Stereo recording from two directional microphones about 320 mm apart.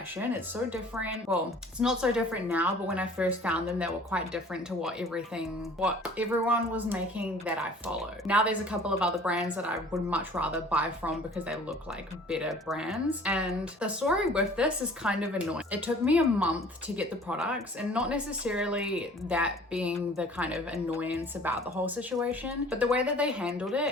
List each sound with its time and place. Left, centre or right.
0.2 s speech: centre